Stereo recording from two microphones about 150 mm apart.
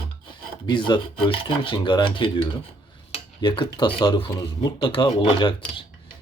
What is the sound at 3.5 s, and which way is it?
Speech, 30° left (ahead or behind).